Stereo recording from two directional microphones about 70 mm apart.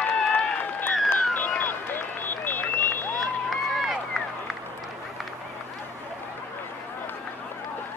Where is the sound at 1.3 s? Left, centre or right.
Left.